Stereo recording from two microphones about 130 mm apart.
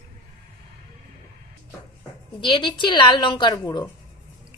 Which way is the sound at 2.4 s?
35° left (ahead or behind).